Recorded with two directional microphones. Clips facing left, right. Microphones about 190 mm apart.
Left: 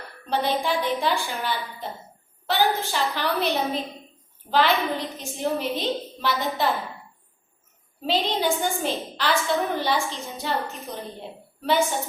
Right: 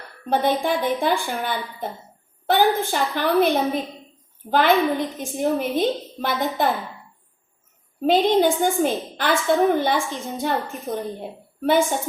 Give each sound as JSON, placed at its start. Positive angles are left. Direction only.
{"t": 0.3, "sound": "a woman's voice", "side_deg": -50}
{"t": 8.0, "sound": "a woman's voice", "side_deg": -50}